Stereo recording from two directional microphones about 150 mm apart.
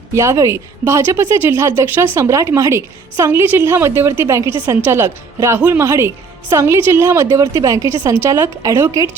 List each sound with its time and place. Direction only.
0.1 s a woman's voice: 20° right (ahead or behind)